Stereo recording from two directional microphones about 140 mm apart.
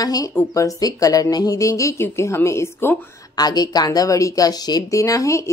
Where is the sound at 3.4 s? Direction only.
30° left (ahead or behind).